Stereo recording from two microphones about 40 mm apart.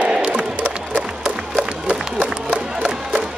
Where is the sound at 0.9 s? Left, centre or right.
Centre.